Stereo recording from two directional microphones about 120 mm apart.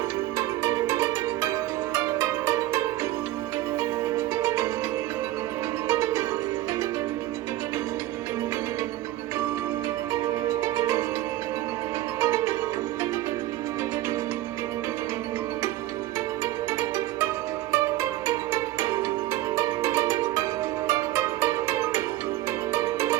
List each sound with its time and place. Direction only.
0.3 s music: 25° right (ahead or behind)
4.4 s music: 25° right (ahead or behind)
5.9 s music: 25° right (ahead or behind)
10.6 s music: 25° right (ahead or behind)
12.2 s music: 25° right (ahead or behind)
18.3 s music: 25° right (ahead or behind)